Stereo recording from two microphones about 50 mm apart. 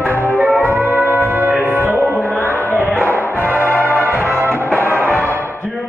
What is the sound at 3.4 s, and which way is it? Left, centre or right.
Music, right.